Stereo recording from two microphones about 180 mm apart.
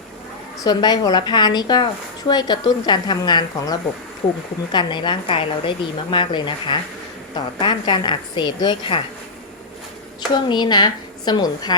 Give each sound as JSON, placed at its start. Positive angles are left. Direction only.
{"t": 0.6, "sound": "a woman's voice", "side_deg": 20}
{"t": 10.3, "sound": "a woman's voice", "side_deg": 25}